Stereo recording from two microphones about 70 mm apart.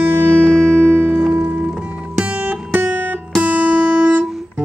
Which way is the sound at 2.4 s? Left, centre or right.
Right.